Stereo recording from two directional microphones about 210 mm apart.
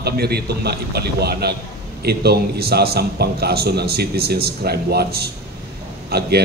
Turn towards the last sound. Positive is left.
turn(degrees=-50)  # may be behind; listen again after turning